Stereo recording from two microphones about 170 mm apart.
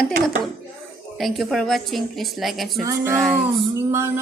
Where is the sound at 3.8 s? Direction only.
15° right (ahead or behind).